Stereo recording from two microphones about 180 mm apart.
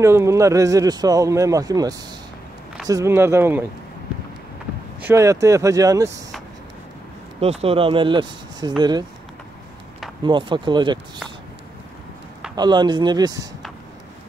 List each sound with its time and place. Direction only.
0.0 s a man's voice: 15° right (ahead or behind)
5.0 s speech: 15° right (ahead or behind)
7.3 s a man's voice: 35° right (ahead or behind)
10.2 s a man's voice: 25° right (ahead or behind)
12.5 s a man's voice: 25° right (ahead or behind)